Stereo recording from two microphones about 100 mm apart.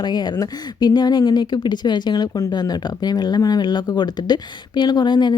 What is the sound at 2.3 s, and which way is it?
Speech, 35° left (ahead or behind).